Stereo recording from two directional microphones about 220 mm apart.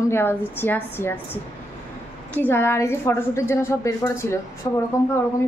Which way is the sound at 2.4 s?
10° left (ahead or behind).